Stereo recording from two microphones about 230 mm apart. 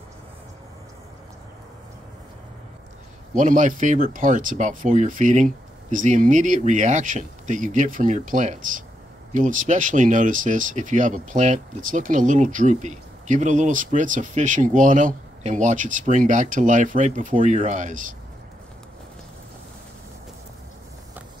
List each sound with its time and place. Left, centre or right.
3.3 s speech: right